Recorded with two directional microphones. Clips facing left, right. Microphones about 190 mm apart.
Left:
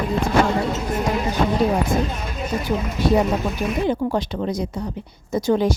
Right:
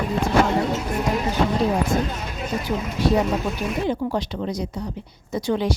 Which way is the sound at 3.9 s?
50° left (ahead or behind).